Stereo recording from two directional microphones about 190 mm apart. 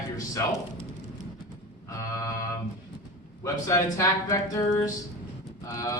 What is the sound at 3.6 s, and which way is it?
Speech, 15° left (ahead or behind).